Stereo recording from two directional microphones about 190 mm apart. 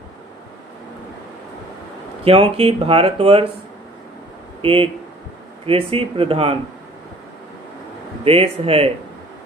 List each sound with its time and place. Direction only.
2.2 s speech: 30° right (ahead or behind)
4.6 s speech: 30° right (ahead or behind)
8.2 s speech: 30° right (ahead or behind)